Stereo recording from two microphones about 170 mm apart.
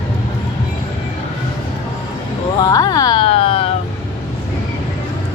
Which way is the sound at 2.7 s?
25° left (ahead or behind).